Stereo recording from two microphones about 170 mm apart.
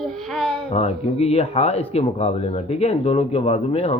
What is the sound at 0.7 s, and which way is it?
Speech, 40° left (ahead or behind).